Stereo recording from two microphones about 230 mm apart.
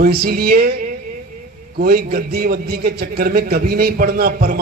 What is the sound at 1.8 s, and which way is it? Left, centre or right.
A man's voice, right.